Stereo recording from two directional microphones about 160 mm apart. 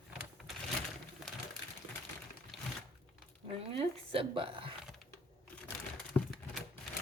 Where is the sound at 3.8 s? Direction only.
35° right (ahead or behind).